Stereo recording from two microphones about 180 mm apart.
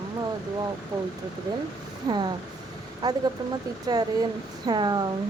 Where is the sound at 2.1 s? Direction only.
20° right (ahead or behind).